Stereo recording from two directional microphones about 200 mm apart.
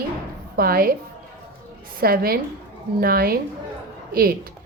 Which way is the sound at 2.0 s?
50° right (ahead or behind).